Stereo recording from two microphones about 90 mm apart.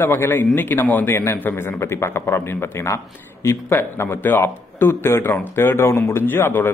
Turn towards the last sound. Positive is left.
turn(degrees=25)  # may be behind; listen again after turning